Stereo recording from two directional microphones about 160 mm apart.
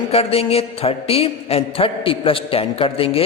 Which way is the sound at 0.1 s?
40° left (ahead or behind).